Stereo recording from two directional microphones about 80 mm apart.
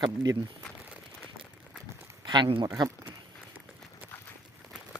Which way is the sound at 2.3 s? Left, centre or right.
Right.